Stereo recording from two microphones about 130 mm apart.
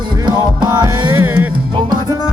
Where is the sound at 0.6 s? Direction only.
25° right (ahead or behind).